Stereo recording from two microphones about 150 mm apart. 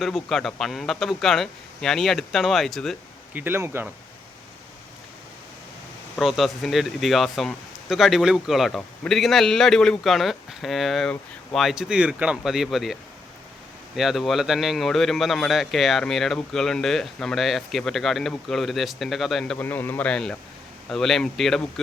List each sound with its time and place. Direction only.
0.0 s a man's voice: centre (ahead or behind)
3.3 s speech: 15° right (ahead or behind)
6.1 s a man's voice: centre (ahead or behind)
19.5 s a man's voice: 15° left (ahead or behind)